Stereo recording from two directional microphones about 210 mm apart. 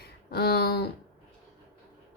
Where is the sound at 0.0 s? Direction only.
50° left (ahead or behind).